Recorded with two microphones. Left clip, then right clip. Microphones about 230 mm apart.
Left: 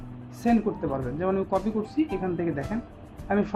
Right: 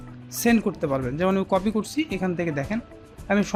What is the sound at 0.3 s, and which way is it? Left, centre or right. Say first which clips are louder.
Speech: right 3 dB; right.